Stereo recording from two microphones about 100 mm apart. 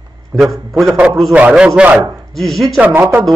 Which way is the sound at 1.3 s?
10° right (ahead or behind).